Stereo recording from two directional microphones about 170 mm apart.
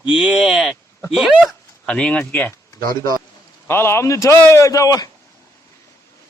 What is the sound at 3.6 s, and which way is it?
Speech, 15° left (ahead or behind).